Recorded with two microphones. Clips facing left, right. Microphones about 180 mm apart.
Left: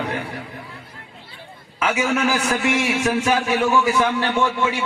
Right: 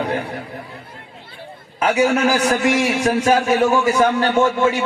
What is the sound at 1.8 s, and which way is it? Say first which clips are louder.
A man's voice: right 4 dB; 35° right (ahead or behind).